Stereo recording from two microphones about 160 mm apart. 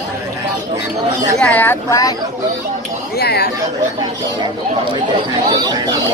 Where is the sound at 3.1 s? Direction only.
90° left.